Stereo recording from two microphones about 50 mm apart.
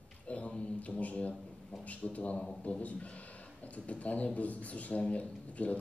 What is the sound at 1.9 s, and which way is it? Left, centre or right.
Speech, left.